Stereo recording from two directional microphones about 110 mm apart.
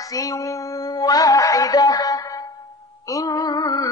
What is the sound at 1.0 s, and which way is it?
Music, 35° left (ahead or behind).